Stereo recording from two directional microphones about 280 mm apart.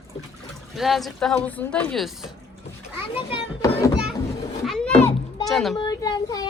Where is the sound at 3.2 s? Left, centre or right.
Centre.